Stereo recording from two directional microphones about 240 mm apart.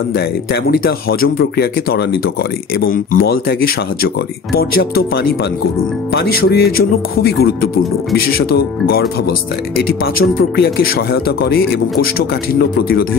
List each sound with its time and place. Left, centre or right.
0.1 s speech: left